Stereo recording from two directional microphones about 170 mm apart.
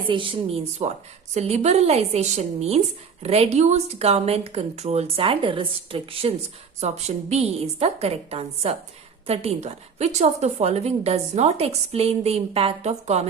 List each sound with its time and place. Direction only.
0.1 s a woman's voice: 30° right (ahead or behind)